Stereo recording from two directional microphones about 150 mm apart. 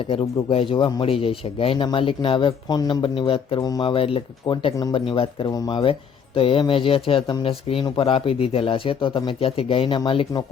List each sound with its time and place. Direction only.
0.1 s speech: 40° left (ahead or behind)